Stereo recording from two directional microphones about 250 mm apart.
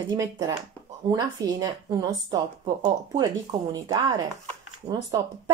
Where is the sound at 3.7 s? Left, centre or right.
Centre.